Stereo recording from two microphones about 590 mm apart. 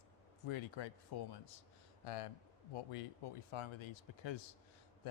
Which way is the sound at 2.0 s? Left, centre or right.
Left.